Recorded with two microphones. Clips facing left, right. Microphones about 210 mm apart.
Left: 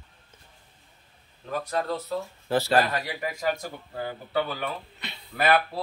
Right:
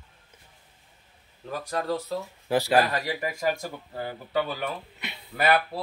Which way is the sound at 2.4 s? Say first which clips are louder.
Right 1 dB; 15° right (ahead or behind).